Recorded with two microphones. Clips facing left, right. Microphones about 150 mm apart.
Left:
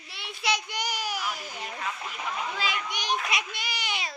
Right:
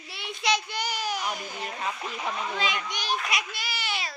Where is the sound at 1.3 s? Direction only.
20° right (ahead or behind).